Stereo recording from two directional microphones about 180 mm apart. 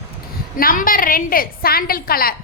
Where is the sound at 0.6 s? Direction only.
50° left (ahead or behind).